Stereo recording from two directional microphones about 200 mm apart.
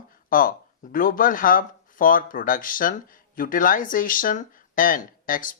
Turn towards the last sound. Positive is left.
turn(degrees=45)  # may be behind; listen again after turning